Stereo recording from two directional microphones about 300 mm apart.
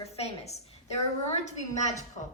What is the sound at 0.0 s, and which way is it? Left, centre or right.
A woman's voice, left.